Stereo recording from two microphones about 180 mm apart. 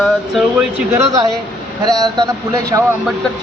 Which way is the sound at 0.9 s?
20° right (ahead or behind).